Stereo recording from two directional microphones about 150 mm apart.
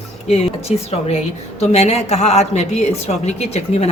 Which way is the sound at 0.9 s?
40° left (ahead or behind).